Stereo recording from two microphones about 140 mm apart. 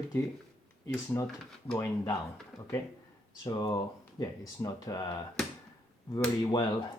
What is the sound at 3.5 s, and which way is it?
Speech, 30° left (ahead or behind).